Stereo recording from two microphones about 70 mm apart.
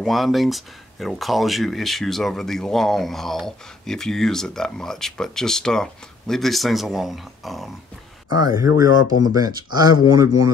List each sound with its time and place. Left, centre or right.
0.0 s speech: centre
8.3 s speech: right